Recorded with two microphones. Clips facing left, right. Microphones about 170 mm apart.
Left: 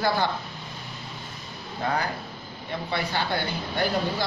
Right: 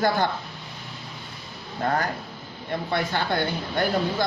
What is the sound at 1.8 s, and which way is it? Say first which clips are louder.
Speech: right 2 dB; 50° right (ahead or behind).